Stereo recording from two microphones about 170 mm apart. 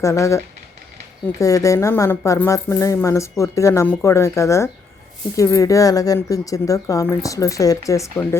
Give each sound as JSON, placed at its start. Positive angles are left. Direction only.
{"t": 0.0, "sound": "speech", "side_deg": 15}